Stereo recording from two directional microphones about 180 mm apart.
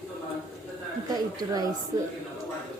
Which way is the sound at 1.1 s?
20° right (ahead or behind).